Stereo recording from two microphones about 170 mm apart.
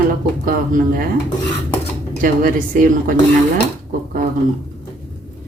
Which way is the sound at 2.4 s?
55° right (ahead or behind).